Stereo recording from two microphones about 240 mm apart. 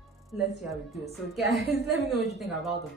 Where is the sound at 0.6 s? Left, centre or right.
Centre.